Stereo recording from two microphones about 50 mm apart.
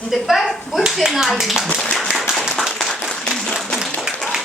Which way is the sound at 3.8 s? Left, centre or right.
Centre.